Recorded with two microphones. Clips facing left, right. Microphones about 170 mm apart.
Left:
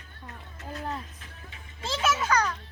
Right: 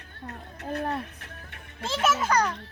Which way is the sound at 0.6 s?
60° right (ahead or behind).